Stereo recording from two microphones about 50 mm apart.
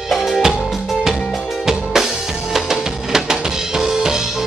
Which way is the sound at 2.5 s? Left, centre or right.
Centre.